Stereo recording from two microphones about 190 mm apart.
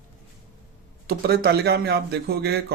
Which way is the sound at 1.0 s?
55° right (ahead or behind).